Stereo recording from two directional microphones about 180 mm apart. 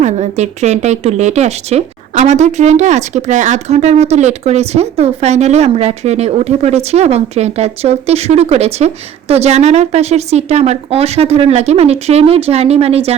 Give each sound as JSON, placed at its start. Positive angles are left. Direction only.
{"t": 0.0, "sound": "speech", "side_deg": -40}